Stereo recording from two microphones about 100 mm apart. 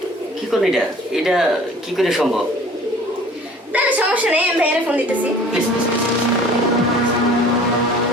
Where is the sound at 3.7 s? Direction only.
15° right (ahead or behind).